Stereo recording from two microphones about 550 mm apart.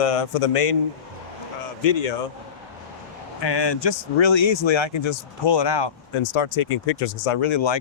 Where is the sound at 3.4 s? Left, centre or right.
Left.